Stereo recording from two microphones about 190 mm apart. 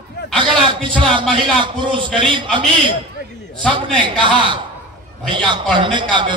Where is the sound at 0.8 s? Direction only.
25° right (ahead or behind).